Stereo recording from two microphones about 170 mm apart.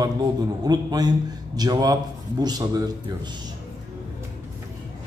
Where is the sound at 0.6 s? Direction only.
25° right (ahead or behind).